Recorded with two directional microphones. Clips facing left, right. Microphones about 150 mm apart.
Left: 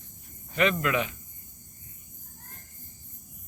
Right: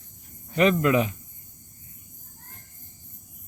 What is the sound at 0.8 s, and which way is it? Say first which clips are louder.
Speech: right 6 dB; 35° right (ahead or behind).